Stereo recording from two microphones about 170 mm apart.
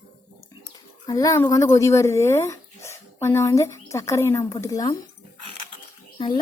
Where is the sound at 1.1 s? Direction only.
20° left (ahead or behind).